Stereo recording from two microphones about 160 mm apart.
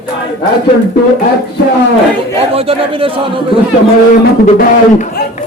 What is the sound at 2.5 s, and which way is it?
A man's voice, 35° right (ahead or behind).